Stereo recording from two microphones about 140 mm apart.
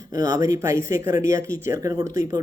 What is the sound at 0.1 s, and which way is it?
Speech, 25° right (ahead or behind).